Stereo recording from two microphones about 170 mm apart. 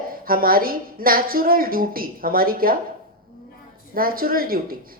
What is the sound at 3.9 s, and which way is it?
Speech, 60° right (ahead or behind).